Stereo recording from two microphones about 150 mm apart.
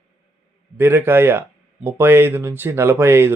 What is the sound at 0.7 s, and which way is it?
Speech, 15° right (ahead or behind).